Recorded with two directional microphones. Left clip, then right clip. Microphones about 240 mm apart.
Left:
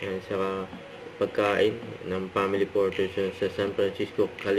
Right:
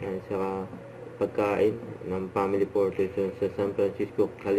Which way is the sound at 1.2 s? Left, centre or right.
Centre.